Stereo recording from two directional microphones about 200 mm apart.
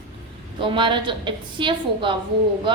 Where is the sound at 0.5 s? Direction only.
25° right (ahead or behind).